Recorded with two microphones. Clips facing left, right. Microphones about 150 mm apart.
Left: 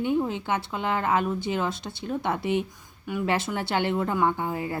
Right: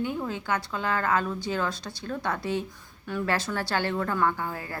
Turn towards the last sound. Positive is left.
turn(degrees=20)  # may be behind; listen again after turning